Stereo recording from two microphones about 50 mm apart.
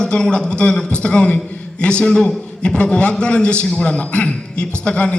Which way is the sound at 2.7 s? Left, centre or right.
Left.